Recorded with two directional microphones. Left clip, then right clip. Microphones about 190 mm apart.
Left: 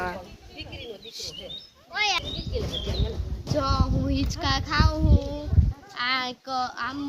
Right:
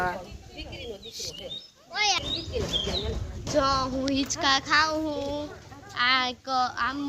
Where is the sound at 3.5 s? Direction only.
Centre (ahead or behind).